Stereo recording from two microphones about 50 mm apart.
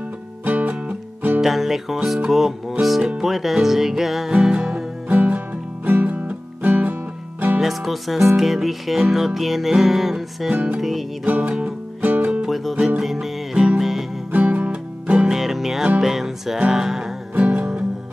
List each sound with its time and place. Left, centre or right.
0.5 s music: right
1.4 s music: centre
5.0 s music: right
7.6 s music: centre
10.5 s music: right
10.8 s music: centre
11.2 s music: right
12.4 s music: centre
14.3 s music: right
15.2 s music: centre
17.4 s music: right